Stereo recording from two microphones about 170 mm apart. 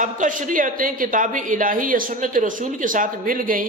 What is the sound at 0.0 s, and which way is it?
A man's voice, 50° right (ahead or behind).